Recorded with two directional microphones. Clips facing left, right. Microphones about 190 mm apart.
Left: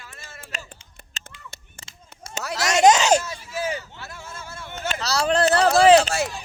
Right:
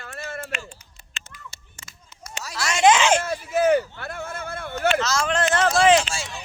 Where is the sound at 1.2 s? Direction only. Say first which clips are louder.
Even; 40° left (ahead or behind).